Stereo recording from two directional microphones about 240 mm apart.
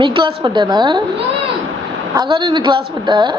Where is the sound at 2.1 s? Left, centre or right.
Centre.